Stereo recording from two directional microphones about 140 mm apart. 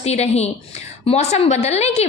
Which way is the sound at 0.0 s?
50° left (ahead or behind).